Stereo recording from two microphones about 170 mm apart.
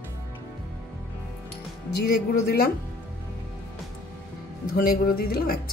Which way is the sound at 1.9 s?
65° left (ahead or behind).